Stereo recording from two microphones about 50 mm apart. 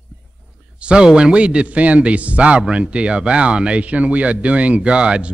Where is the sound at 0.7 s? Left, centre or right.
Centre.